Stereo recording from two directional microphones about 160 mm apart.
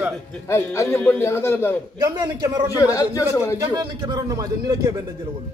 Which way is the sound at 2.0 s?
20° right (ahead or behind).